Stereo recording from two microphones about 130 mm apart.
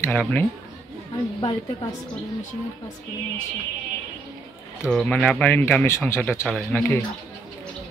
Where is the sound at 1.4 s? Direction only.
35° left (ahead or behind).